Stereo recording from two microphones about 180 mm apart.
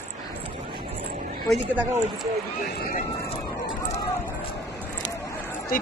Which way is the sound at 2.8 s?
50° left (ahead or behind).